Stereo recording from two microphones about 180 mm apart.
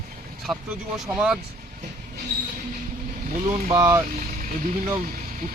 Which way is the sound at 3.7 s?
15° right (ahead or behind).